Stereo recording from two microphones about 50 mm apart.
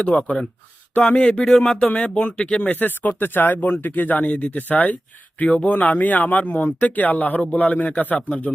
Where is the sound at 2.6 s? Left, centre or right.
Left.